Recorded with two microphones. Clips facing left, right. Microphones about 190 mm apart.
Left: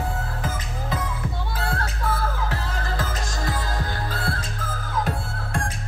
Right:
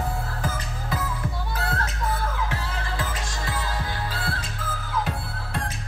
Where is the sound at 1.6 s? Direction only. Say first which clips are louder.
Left 1 dB; 30° left (ahead or behind).